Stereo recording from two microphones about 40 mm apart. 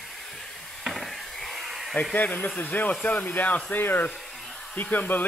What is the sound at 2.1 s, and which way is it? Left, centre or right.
Speech, left.